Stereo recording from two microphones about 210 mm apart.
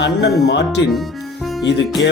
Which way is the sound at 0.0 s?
55° left (ahead or behind).